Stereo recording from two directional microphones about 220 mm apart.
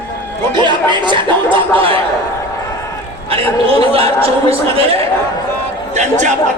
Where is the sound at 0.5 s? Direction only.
20° right (ahead or behind).